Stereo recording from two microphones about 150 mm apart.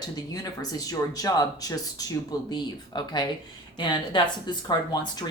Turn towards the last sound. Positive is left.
turn(degrees=25)  # may be behind; listen again after turning